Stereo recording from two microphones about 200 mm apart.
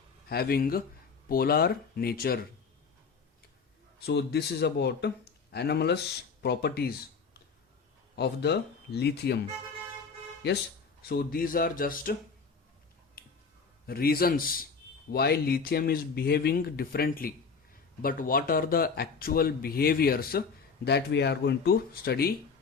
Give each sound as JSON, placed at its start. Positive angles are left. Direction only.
{"t": 0.3, "sound": "speech", "side_deg": 50}
{"t": 4.0, "sound": "speech", "side_deg": 55}
{"t": 8.1, "sound": "speech", "side_deg": 55}
{"t": 11.1, "sound": "speech", "side_deg": 50}
{"t": 13.2, "sound": "a sound", "side_deg": 50}
{"t": 13.8, "sound": "speech", "side_deg": 50}